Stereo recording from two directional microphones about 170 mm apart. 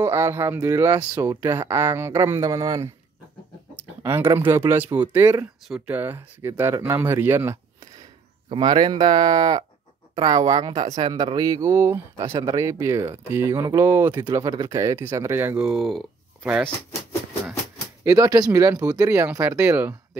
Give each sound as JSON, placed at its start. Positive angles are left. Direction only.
{"t": 0.0, "sound": "speech", "side_deg": -15}
{"t": 8.5, "sound": "speech", "side_deg": -30}
{"t": 18.0, "sound": "speech", "side_deg": -20}